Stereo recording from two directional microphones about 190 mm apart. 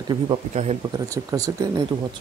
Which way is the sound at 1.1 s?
20° right (ahead or behind).